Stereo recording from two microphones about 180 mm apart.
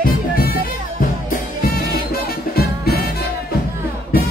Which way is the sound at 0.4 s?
55° left (ahead or behind).